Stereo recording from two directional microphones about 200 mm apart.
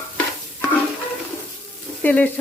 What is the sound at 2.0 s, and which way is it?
Stir, 10° left (ahead or behind).